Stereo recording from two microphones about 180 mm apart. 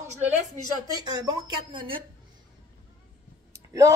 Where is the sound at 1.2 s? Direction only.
20° right (ahead or behind).